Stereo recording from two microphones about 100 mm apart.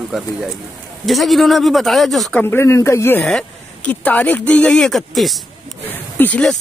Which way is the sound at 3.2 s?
10° left (ahead or behind).